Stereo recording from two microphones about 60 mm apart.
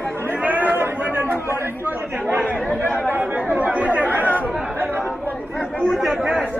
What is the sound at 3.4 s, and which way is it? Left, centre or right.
Chatter, right.